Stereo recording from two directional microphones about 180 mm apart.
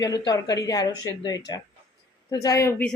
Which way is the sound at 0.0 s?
20° left (ahead or behind).